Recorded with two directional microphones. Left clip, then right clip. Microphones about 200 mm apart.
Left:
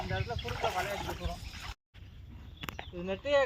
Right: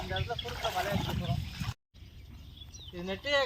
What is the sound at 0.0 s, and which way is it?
Speech, centre (ahead or behind).